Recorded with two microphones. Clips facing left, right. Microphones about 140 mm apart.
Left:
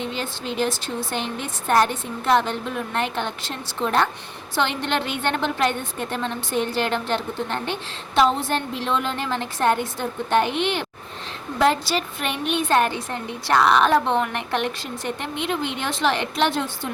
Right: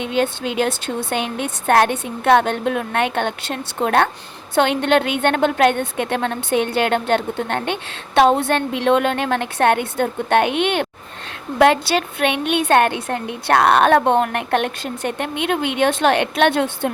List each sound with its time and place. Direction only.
0.2 s a woman's voice: 60° right (ahead or behind)